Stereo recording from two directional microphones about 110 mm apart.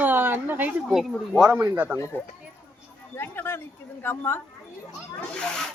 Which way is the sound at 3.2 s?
20° left (ahead or behind).